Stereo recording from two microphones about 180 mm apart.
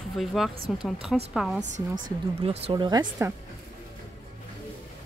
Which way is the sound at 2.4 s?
30° right (ahead or behind).